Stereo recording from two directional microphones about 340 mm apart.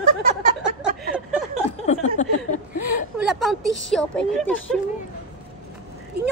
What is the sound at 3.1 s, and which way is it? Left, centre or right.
A woman's voice, centre.